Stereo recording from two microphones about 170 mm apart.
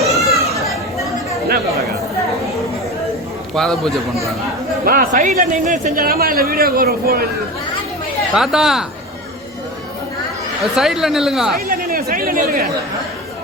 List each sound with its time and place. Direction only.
0.1 s chatter: centre (ahead or behind)
3.5 s speech: centre (ahead or behind)
4.9 s speech: 55° right (ahead or behind)
8.4 s speech: centre (ahead or behind)
10.6 s speech: centre (ahead or behind)
11.5 s speech: 60° right (ahead or behind)